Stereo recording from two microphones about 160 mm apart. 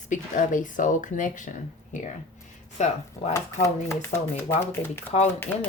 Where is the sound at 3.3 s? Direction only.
15° left (ahead or behind).